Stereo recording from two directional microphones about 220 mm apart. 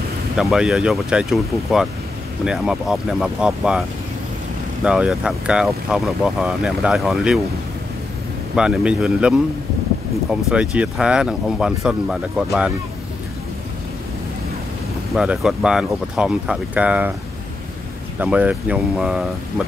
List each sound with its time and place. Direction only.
0.4 s speech: centre (ahead or behind)
4.8 s speech: 5° right (ahead or behind)
8.5 s speech: 5° right (ahead or behind)
10.5 s speech: 5° right (ahead or behind)
15.1 s speech: 5° right (ahead or behind)
18.2 s speech: 5° right (ahead or behind)